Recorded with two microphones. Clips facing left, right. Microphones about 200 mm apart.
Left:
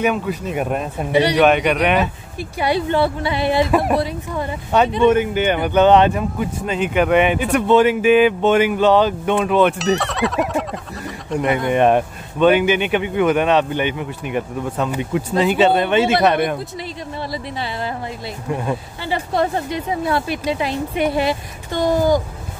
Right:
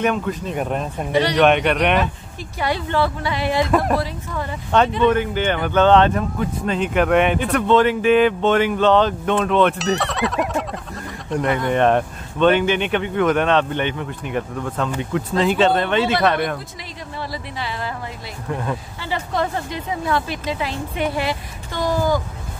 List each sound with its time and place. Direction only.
0.0 s speech: 5° left (ahead or behind)
3.3 s a woman's voice: 25° left (ahead or behind)
3.7 s a woman's voice: 5° left (ahead or behind)
4.0 s a woman's voice: 15° left (ahead or behind)
18.5 s speech: 15° left (ahead or behind)
20.2 s a woman's voice: 10° left (ahead or behind)